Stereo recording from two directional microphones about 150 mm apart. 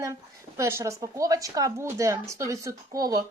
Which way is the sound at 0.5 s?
20° right (ahead or behind).